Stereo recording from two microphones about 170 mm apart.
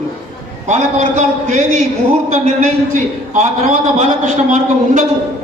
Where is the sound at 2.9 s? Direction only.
45° right (ahead or behind).